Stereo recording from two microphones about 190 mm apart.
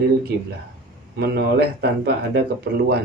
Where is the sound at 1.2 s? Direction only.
60° right (ahead or behind).